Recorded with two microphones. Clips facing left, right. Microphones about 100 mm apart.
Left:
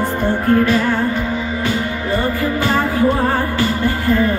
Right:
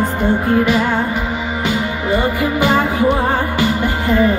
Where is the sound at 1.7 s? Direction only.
15° right (ahead or behind).